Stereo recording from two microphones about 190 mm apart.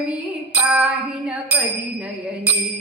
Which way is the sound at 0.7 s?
5° right (ahead or behind).